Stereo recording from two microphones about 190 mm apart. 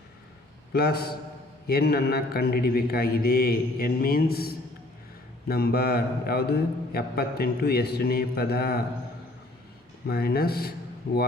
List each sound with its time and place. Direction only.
0.7 s a man's voice: 55° left (ahead or behind)
10.1 s a man's voice: 55° left (ahead or behind)